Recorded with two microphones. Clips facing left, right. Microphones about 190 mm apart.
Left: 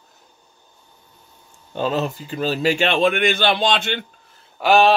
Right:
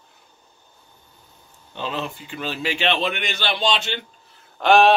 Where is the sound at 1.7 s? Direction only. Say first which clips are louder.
Left 7 dB; 45° left (ahead or behind).